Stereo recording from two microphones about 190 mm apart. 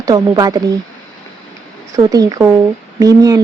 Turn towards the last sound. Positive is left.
turn(degrees=-20)  # may be behind; listen again after turning